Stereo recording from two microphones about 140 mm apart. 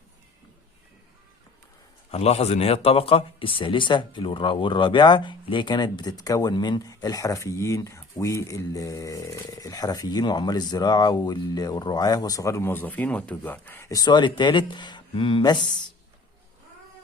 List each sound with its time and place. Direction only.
2.0 s a man's voice: 50° left (ahead or behind)